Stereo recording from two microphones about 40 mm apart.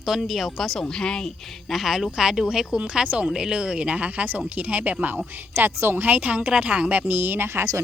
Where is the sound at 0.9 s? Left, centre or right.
Centre.